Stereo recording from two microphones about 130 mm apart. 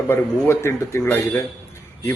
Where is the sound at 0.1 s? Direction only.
20° left (ahead or behind).